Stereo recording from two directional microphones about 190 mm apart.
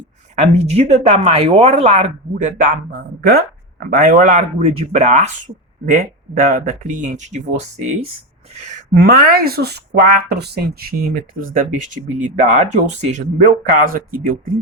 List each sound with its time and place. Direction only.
0.3 s speech: 35° right (ahead or behind)
8.5 s speech: 40° right (ahead or behind)